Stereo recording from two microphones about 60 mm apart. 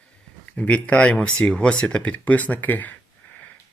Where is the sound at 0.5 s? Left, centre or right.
Left.